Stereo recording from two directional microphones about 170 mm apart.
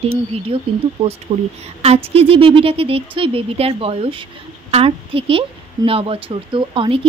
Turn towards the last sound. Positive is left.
turn(degrees=-30)  # may be behind; listen again after turning